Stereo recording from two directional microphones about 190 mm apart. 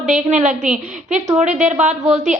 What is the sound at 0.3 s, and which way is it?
Speech, 40° right (ahead or behind).